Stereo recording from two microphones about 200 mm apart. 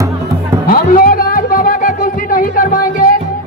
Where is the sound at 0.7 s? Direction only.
45° left (ahead or behind).